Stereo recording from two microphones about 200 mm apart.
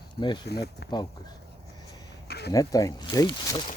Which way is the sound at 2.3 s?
55° left (ahead or behind).